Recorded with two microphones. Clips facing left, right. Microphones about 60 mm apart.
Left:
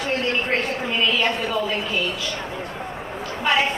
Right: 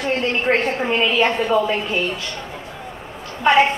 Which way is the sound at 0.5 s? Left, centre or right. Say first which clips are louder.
Right 5 dB; right.